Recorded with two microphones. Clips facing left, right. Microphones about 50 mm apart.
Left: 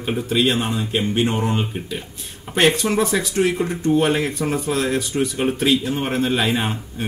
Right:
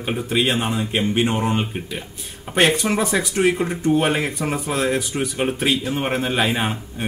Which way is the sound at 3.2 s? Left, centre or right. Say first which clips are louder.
Right 1 dB; right.